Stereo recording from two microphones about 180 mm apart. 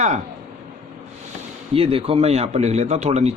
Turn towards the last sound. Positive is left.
turn(degrees=-40)  # may be behind; listen again after turning